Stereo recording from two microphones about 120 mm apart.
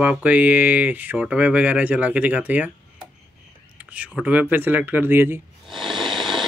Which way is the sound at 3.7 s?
10° right (ahead or behind).